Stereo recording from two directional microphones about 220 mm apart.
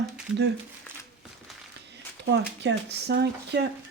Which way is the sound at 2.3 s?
50° right (ahead or behind).